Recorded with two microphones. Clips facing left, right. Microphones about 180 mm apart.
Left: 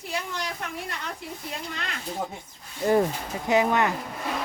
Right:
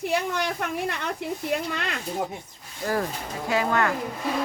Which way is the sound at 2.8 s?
20° left (ahead or behind).